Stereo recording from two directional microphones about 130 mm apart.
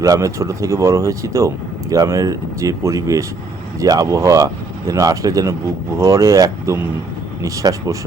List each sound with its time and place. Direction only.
0.0 s speech: 25° right (ahead or behind)